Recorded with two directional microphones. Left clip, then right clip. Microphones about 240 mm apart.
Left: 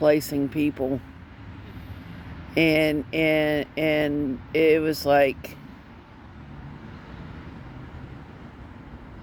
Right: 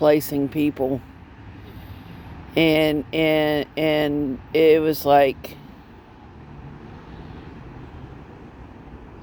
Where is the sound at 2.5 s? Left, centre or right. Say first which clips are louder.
Right 3 dB; right.